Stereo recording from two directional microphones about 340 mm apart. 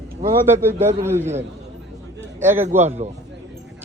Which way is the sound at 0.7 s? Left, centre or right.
Centre.